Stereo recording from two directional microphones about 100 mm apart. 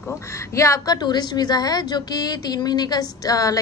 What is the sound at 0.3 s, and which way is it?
A woman's voice, 30° left (ahead or behind).